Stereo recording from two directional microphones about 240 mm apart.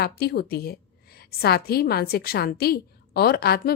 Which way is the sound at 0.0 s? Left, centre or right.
Left.